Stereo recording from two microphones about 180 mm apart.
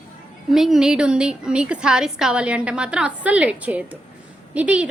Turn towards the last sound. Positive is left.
turn(degrees=-5)  # may be behind; listen again after turning